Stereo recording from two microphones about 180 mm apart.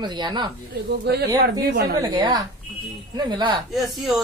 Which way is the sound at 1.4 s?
60° right (ahead or behind).